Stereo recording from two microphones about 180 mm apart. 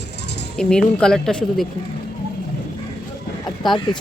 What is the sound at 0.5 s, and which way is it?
Speech, 5° left (ahead or behind).